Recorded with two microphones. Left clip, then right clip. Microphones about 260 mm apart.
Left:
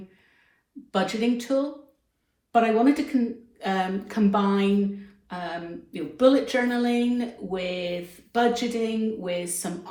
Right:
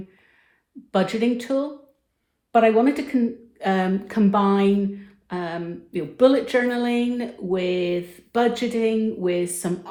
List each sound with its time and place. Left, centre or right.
0.9 s speech: right